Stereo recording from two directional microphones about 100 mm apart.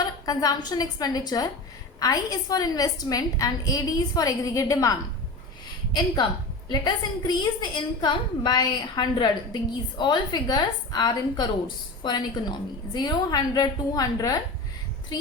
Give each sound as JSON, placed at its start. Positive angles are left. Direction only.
{"t": 0.0, "sound": "a woman's voice", "side_deg": 40}
{"t": 6.7, "sound": "a woman's voice", "side_deg": 45}